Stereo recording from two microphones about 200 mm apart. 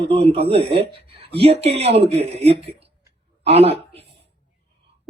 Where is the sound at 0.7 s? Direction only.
30° right (ahead or behind).